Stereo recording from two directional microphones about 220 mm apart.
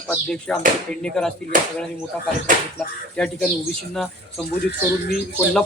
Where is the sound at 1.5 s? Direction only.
40° right (ahead or behind).